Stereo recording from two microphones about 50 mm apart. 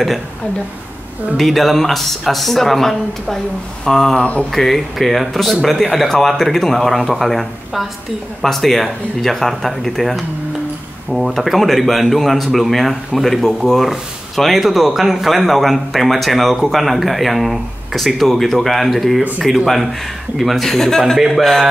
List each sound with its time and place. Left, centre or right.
1.3 s speech: centre
4.2 s speech: left
4.5 s speech: centre